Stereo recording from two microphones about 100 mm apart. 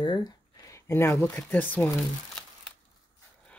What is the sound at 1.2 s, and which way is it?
Speech, 20° left (ahead or behind).